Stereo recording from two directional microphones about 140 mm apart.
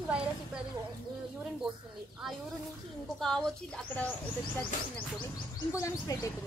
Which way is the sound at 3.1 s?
5° left (ahead or behind).